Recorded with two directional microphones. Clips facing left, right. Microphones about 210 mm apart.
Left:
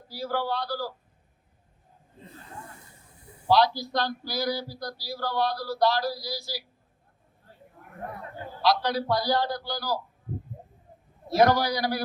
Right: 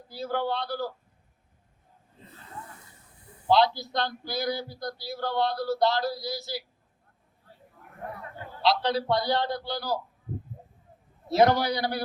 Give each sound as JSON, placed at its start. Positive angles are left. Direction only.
{"t": 0.1, "sound": "a man's voice", "side_deg": -20}
{"t": 3.4, "sound": "a man's voice", "side_deg": -20}
{"t": 8.6, "sound": "a man's voice", "side_deg": -25}
{"t": 11.3, "sound": "a man's voice", "side_deg": -25}